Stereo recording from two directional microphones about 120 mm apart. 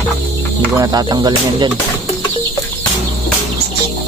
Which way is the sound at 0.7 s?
35° right (ahead or behind).